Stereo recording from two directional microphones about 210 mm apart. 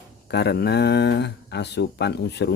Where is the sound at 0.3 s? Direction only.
50° left (ahead or behind).